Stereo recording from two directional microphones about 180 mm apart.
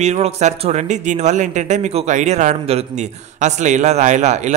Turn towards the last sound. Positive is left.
turn(degrees=-40)  # may be behind; listen again after turning